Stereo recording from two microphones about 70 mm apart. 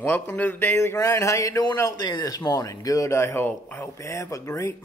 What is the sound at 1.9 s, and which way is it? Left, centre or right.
Speech, left.